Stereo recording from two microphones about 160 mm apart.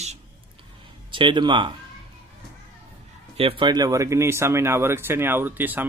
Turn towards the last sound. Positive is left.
turn(degrees=-10)  # may be behind; listen again after turning